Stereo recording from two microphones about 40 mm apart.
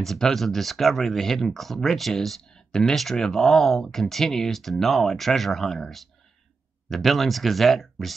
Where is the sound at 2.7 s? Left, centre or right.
Centre.